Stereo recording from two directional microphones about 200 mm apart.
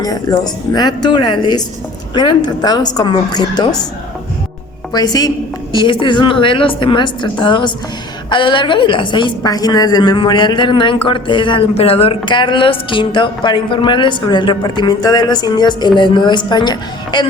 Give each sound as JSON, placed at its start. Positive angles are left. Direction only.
{"t": 0.0, "sound": "a woman's voice", "side_deg": 20}
{"t": 4.9, "sound": "a woman's voice", "side_deg": 20}